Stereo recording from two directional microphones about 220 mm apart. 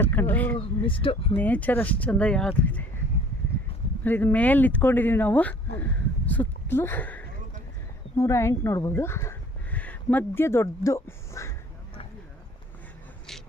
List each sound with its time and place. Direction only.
0.0 s a sound: 10° left (ahead or behind)
0.6 s speech: 25° left (ahead or behind)
1.4 s speech: 5° left (ahead or behind)
4.0 s speech: 10° left (ahead or behind)